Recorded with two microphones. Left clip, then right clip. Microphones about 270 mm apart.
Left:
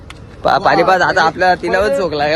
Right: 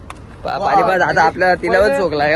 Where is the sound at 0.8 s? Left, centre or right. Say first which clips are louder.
Left 3 dB; centre.